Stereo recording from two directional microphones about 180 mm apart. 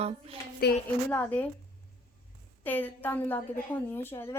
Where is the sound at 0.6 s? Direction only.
60° left (ahead or behind).